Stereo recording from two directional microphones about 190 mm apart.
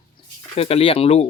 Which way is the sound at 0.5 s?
30° left (ahead or behind).